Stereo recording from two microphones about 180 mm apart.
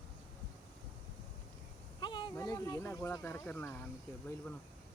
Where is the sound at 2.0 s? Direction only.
25° left (ahead or behind).